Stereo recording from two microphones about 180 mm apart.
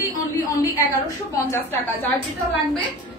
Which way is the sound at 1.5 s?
10° left (ahead or behind).